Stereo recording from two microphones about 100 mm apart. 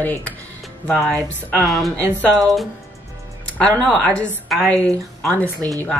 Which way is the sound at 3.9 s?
10° left (ahead or behind).